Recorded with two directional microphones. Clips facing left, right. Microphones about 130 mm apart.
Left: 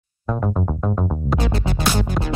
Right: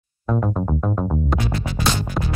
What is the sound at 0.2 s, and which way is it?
Music, centre (ahead or behind).